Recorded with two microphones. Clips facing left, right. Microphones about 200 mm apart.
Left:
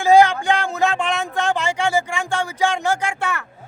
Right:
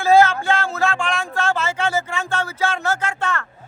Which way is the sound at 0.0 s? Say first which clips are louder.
Left 1 dB; 15° left (ahead or behind).